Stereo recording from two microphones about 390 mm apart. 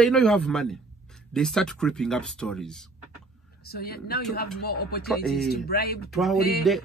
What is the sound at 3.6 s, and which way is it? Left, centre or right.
Speech, left.